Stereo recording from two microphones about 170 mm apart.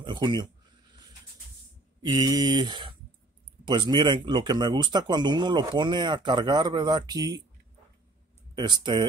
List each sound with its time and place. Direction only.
0.0 s speech: 25° right (ahead or behind)
2.0 s speech: 25° right (ahead or behind)
8.5 s speech: 25° right (ahead or behind)